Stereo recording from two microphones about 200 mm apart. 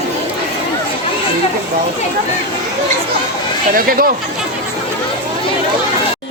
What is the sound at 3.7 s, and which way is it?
Speech, 45° right (ahead or behind).